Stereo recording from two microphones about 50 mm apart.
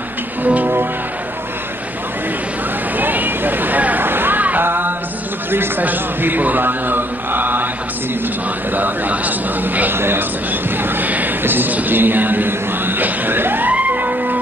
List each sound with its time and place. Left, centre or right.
0.4 s music: right
3.0 s a sound: right
4.6 s music: right
5.5 s a man's voice: right
8.7 s speech: right
9.9 s a man's voice: right
10.8 s a sound: right